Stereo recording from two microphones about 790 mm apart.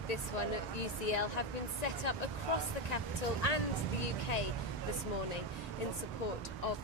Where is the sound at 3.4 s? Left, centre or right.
Left.